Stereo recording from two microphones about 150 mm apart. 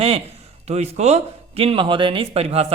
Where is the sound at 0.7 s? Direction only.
45° right (ahead or behind).